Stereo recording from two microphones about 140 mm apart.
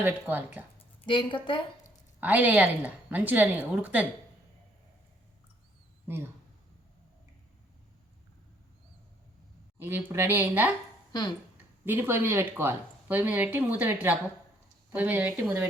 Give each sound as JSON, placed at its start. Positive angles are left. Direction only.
{"t": 0.0, "sound": "speech", "side_deg": -15}
{"t": 1.0, "sound": "a woman's voice", "side_deg": 35}
{"t": 2.2, "sound": "speech", "side_deg": -10}
{"t": 9.7, "sound": "speech", "side_deg": -15}
{"t": 11.1, "sound": "speech", "side_deg": 25}
{"t": 11.5, "sound": "speech", "side_deg": -15}